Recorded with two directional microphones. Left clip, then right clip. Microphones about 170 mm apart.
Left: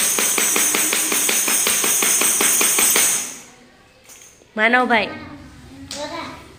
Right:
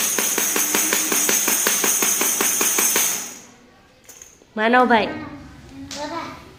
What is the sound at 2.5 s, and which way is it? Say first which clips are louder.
Music: left 2 dB; 40° right (ahead or behind).